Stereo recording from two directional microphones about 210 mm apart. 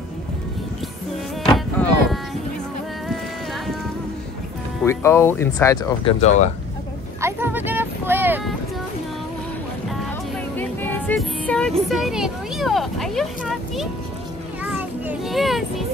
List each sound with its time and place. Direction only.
1.4 s a sound: centre (ahead or behind)
4.8 s speech: 10° left (ahead or behind)
6.0 s speech: 35° left (ahead or behind)
7.2 s a sound: 10° right (ahead or behind)
10.5 s music: 10° left (ahead or behind)
11.9 s speech: centre (ahead or behind)
14.6 s children playing: 5° right (ahead or behind)